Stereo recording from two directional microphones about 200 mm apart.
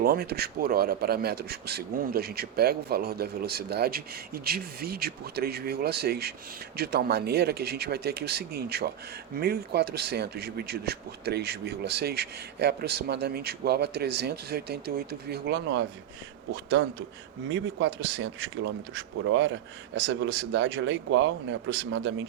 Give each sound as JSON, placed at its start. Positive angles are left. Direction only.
{"t": 0.0, "sound": "speech", "side_deg": -50}